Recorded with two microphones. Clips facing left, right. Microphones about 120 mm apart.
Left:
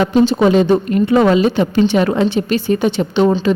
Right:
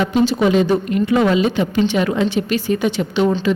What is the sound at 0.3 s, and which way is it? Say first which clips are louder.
Speech: left 3 dB; 35° left (ahead or behind).